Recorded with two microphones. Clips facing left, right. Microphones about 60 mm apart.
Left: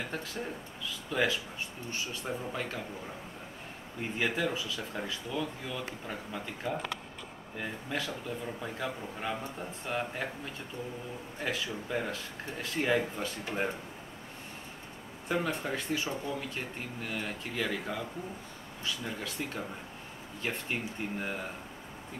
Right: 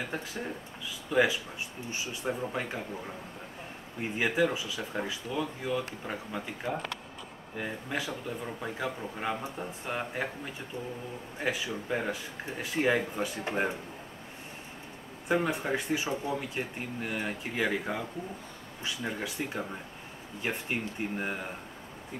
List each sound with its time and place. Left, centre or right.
0.1 s speech: centre
4.0 s speech: centre
15.2 s speech: centre